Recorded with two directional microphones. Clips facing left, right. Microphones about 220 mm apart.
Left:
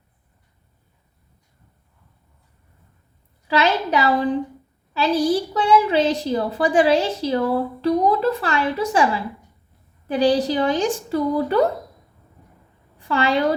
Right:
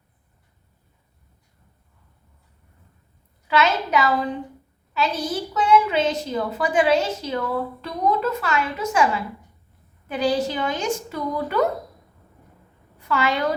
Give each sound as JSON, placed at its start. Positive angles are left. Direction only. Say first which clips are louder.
{"t": 3.4, "sound": "a woman's voice", "louder": "left 2 dB", "side_deg": 30}
{"t": 13.0, "sound": "a woman's voice", "louder": "left 3 dB", "side_deg": 30}